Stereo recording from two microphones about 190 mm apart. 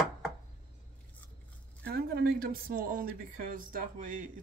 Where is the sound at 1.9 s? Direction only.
55° right (ahead or behind).